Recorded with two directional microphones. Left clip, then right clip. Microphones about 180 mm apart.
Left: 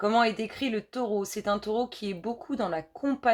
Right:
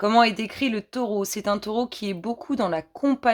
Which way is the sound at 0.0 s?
55° right (ahead or behind).